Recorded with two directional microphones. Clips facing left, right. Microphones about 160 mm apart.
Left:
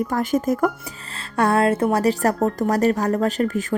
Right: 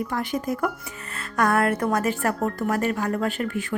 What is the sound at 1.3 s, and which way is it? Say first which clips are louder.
A woman's voice: left 3 dB; 30° left (ahead or behind).